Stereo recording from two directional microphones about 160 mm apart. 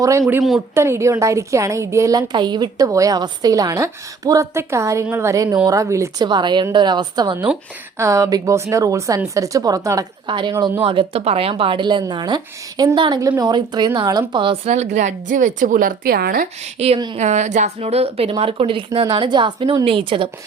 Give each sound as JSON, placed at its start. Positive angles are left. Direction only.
{"t": 0.0, "sound": "a woman's voice", "side_deg": -20}
{"t": 14.7, "sound": "a woman's voice", "side_deg": -45}
{"t": 16.7, "sound": "speech", "side_deg": -40}